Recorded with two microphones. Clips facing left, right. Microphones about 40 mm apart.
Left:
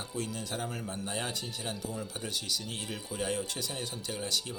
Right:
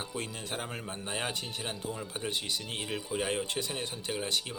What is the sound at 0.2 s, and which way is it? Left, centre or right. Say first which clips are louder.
A man's voice: left 3 dB; right.